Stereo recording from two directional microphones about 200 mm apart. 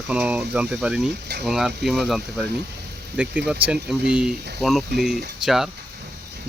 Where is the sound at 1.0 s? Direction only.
55° right (ahead or behind).